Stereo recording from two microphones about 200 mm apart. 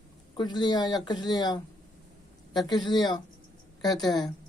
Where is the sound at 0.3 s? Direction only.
20° left (ahead or behind).